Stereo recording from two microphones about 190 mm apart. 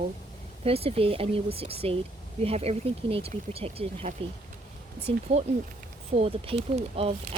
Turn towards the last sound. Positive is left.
turn(degrees=-35)  # may be behind; listen again after turning